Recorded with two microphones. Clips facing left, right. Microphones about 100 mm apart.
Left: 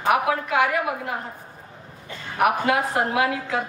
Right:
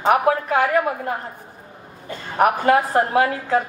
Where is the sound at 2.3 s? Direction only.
40° right (ahead or behind).